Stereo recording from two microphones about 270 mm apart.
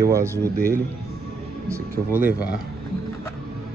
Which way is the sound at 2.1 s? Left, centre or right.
Centre.